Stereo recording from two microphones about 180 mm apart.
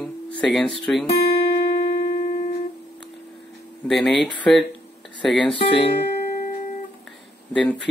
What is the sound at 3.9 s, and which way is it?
Speech, centre (ahead or behind).